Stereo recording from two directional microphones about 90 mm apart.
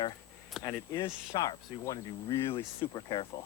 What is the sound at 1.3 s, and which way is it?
Speech, 40° left (ahead or behind).